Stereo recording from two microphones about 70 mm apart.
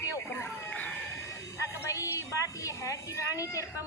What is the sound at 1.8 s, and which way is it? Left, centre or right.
A child's voice, left.